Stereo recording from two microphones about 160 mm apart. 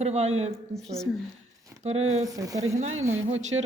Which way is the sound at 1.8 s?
45° right (ahead or behind).